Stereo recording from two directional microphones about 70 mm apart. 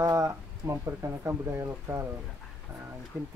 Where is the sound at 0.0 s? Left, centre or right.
Right.